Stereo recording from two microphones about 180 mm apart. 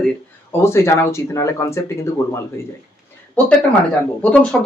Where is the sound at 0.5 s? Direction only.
15° left (ahead or behind).